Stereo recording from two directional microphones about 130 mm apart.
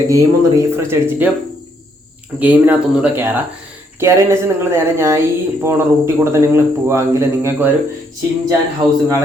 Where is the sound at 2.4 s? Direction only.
15° right (ahead or behind).